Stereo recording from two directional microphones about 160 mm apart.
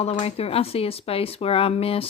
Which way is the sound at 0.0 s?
40° left (ahead or behind).